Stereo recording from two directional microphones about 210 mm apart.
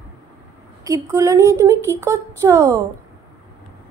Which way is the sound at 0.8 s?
15° right (ahead or behind).